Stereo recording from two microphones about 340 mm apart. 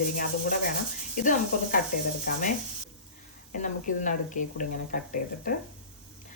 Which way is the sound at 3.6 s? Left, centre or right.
Left.